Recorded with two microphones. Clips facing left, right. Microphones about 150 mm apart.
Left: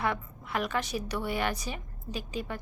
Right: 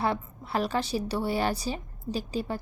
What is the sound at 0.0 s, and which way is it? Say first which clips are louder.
A woman's voice: right 3 dB; 30° right (ahead or behind).